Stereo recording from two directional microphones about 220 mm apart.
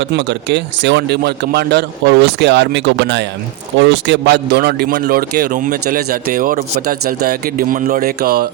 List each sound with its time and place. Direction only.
0.0 s speech: 55° right (ahead or behind)